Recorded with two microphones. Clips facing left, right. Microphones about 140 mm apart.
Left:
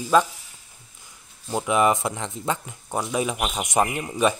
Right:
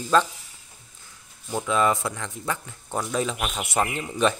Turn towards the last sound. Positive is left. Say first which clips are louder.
# left 1 dB
turn(degrees=10)  # may be behind; listen again after turning